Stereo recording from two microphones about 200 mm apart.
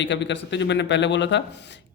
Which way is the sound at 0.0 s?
65° left (ahead or behind).